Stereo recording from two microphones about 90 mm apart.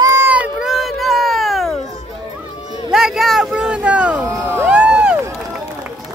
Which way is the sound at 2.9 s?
5° right (ahead or behind).